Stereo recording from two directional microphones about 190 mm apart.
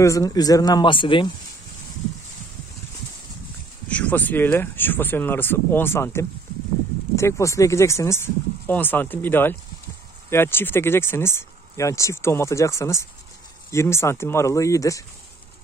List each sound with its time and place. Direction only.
0.0 s speech: 15° left (ahead or behind)
3.9 s speech: 10° left (ahead or behind)